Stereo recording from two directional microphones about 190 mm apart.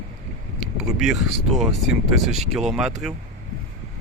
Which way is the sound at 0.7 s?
Centre (ahead or behind).